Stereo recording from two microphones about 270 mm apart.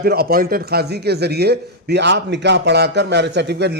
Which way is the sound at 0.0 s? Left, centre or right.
Right.